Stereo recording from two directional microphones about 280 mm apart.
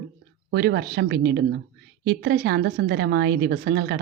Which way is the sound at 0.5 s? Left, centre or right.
Right.